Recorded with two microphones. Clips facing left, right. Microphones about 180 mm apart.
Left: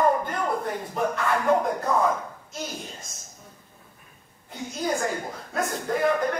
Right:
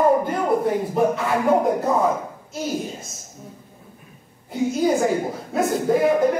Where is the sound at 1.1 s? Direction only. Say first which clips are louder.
Right 3 dB; 10° right (ahead or behind).